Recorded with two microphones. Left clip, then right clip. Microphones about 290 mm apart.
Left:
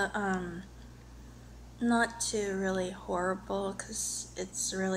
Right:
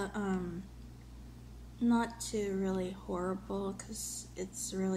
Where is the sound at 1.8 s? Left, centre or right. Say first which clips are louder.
Left 4 dB; left.